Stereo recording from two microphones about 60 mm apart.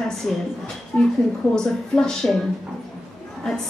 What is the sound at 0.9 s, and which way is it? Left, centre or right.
Speech, centre.